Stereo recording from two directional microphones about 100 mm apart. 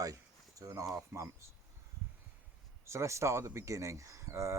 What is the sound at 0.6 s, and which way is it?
Speech, 35° right (ahead or behind).